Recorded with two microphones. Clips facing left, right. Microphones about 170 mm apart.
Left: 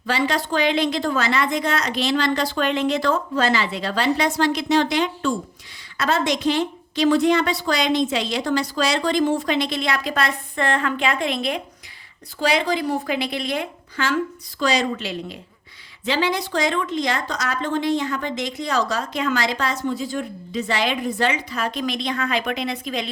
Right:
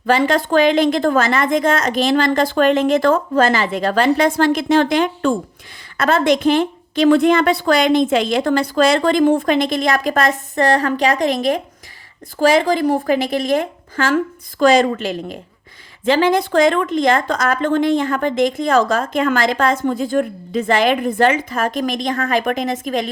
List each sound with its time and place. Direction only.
0.0 s speech: 50° right (ahead or behind)